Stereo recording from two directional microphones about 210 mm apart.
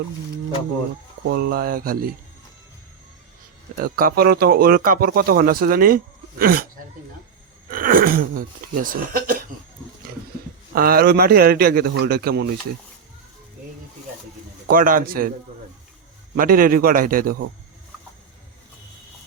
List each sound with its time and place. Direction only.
1.4 s speech: 45° right (ahead or behind)
3.8 s speech: 45° right (ahead or behind)
7.7 s speech: 45° right (ahead or behind)
10.8 s speech: 45° right (ahead or behind)
14.7 s speech: 40° right (ahead or behind)
16.3 s speech: 45° right (ahead or behind)